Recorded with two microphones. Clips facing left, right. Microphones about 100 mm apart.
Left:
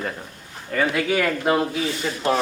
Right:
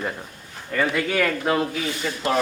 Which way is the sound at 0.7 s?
5° left (ahead or behind).